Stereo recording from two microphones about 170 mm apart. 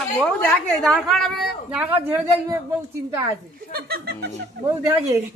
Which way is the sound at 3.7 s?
65° right (ahead or behind).